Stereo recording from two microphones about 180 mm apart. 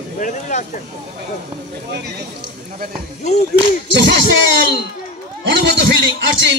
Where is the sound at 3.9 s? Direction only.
85° right.